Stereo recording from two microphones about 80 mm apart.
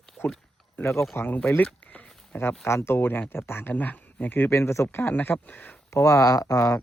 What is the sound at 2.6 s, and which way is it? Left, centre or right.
Speech, left.